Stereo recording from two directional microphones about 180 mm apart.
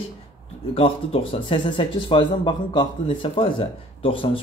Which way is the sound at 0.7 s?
30° left (ahead or behind).